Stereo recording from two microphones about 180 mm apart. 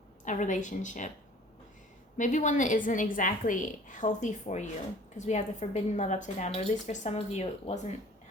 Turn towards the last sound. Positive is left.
turn(degrees=35)  # may be behind; listen again after turning